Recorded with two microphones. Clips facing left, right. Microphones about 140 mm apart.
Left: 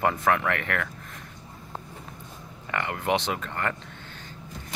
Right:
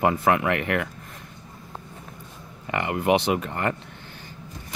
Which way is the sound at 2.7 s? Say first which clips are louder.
Right 5 dB; 15° right (ahead or behind).